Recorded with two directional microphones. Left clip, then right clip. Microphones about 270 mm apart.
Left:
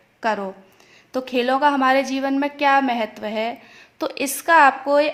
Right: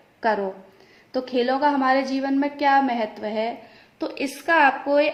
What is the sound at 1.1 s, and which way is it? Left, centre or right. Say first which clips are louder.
A woman's voice: left 2 dB; left.